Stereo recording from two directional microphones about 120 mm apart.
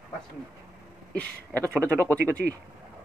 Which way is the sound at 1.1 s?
10° left (ahead or behind).